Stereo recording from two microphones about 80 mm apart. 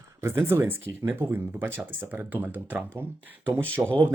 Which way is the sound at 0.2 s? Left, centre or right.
Right.